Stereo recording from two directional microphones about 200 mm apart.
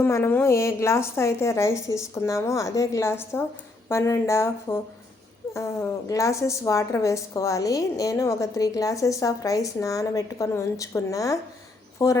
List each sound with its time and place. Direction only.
0.0 s a woman's voice: 10° left (ahead or behind)